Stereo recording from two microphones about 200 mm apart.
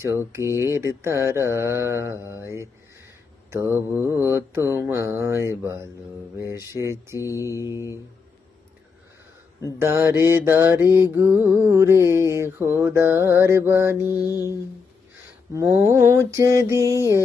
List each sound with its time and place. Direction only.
0.5 s mantra: 15° right (ahead or behind)
7.2 s mantra: 15° left (ahead or behind)
7.6 s mantra: 15° right (ahead or behind)
9.7 s mantra: 10° right (ahead or behind)
15.5 s mantra: 15° right (ahead or behind)